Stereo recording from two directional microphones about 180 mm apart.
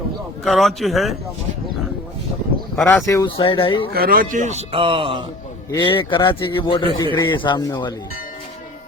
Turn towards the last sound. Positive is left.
turn(degrees=20)  # may be behind; listen again after turning